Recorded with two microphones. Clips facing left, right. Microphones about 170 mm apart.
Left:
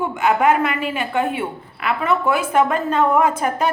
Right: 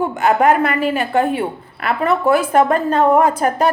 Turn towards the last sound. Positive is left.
turn(degrees=-35)  # may be behind; listen again after turning